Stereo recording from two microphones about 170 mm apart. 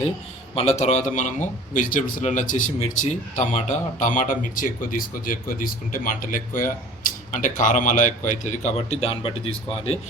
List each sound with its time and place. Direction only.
0.5 s a man's voice: 40° left (ahead or behind)